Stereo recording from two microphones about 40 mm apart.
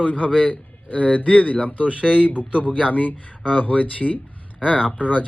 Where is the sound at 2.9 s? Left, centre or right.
Left.